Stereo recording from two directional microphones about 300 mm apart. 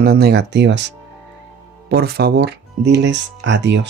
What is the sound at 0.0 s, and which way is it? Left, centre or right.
Speech, right.